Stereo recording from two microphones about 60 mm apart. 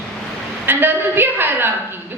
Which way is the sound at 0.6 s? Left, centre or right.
Right.